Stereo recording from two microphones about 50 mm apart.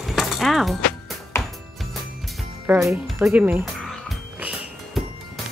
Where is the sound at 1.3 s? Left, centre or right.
Left.